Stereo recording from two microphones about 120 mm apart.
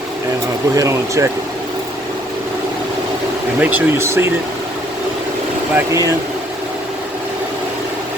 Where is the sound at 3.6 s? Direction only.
15° right (ahead or behind).